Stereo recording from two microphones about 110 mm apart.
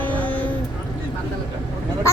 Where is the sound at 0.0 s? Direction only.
15° left (ahead or behind).